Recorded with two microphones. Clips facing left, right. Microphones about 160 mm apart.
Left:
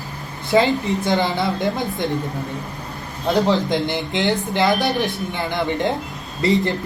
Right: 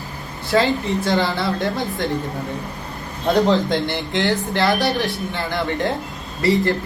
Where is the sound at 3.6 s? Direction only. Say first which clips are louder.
Even; 15° left (ahead or behind).